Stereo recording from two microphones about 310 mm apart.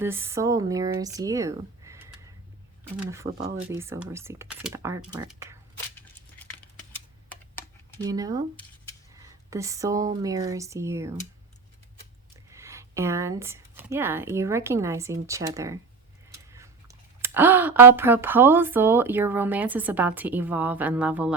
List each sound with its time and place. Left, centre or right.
0.0 s speech: centre
3.2 s speech: right
3.7 s speech: centre
6.4 s scissors: centre
8.0 s speech: centre
9.5 s speech: centre
12.5 s speech: centre